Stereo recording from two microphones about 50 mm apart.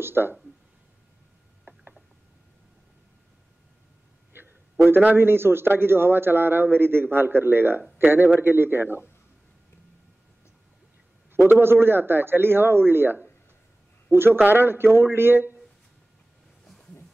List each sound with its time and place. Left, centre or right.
0.0 s a man's voice: right
4.3 s a sound: right
5.1 s a man's voice: right
11.3 s a man's voice: right